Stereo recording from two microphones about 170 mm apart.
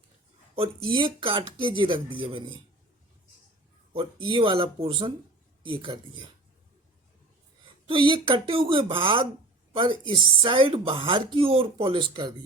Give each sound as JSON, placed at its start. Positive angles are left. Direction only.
{"t": 0.5, "sound": "speech", "side_deg": -30}
{"t": 3.9, "sound": "speech", "side_deg": -30}
{"t": 7.9, "sound": "speech", "side_deg": -30}